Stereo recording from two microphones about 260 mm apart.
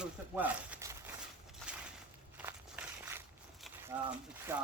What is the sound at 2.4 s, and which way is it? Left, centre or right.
Walk, centre.